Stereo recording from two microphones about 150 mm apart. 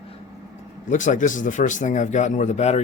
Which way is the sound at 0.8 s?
55° left (ahead or behind).